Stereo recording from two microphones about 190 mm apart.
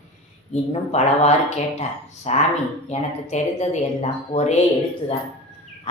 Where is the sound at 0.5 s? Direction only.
35° left (ahead or behind).